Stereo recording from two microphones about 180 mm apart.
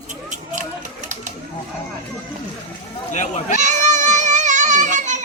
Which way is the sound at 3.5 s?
40° right (ahead or behind).